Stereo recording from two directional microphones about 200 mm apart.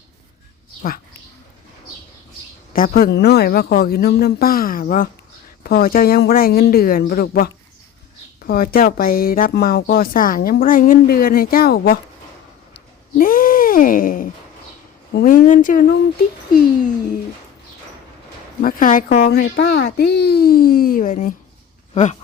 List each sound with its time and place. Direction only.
0.8 s speech: 45° left (ahead or behind)
2.7 s a woman's voice: 45° left (ahead or behind)
12.7 s a sound: 45° left (ahead or behind)
15.1 s a woman's voice: 45° left (ahead or behind)
18.6 s a woman's voice: 45° left (ahead or behind)